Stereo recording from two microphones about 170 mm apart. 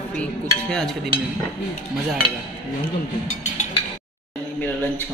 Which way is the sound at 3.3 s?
45° left (ahead or behind).